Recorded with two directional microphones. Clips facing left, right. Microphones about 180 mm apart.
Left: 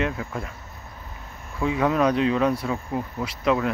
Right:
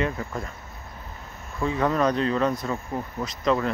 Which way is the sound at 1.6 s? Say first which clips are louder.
Left 2 dB; 5° left (ahead or behind).